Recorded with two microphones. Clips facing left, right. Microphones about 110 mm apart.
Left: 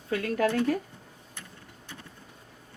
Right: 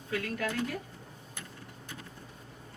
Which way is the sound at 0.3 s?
50° left (ahead or behind).